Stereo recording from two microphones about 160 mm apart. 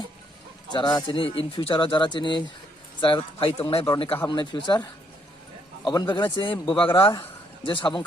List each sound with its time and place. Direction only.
0.7 s speech: 25° left (ahead or behind)